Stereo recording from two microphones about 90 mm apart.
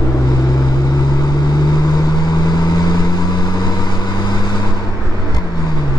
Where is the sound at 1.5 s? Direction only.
50° left (ahead or behind).